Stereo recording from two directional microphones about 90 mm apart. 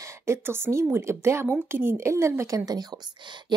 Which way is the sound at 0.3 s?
30° right (ahead or behind).